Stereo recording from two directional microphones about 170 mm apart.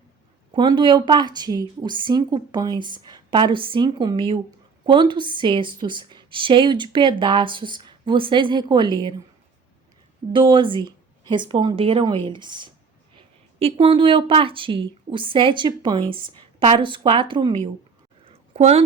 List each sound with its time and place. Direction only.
0.5 s a woman's voice: 30° right (ahead or behind)
10.3 s a woman's voice: 30° right (ahead or behind)
18.3 s a sound: 40° right (ahead or behind)